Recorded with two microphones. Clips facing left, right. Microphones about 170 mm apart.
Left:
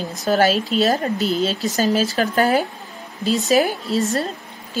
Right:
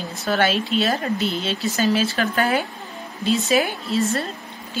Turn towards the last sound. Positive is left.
turn(degrees=40)  # may be behind; listen again after turning